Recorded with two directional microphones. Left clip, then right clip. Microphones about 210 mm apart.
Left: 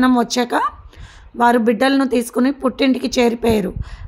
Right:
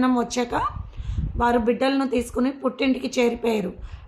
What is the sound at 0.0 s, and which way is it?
Speech, 40° left (ahead or behind).